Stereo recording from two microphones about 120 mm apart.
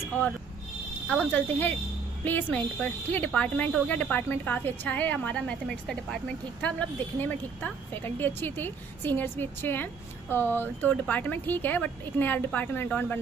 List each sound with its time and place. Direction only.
1.0 s speech: 15° left (ahead or behind)